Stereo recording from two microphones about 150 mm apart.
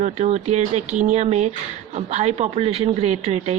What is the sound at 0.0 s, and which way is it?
Speech, 50° right (ahead or behind).